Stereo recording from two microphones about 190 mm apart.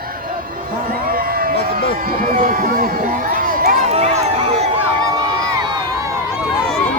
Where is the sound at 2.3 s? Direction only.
45° right (ahead or behind).